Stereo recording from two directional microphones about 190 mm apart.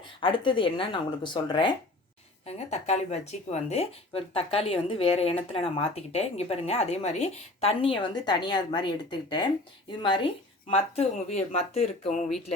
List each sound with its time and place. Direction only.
0.2 s speech: 25° left (ahead or behind)